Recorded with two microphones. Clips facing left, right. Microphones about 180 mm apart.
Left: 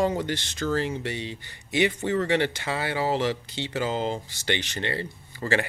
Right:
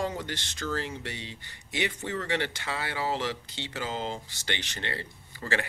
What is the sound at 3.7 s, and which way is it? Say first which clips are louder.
Speech: left 7 dB; 65° left (ahead or behind).